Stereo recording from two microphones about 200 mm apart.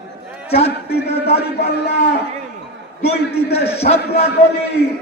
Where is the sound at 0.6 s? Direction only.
30° left (ahead or behind).